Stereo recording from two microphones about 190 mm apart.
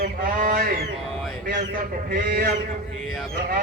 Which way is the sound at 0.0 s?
45° right (ahead or behind).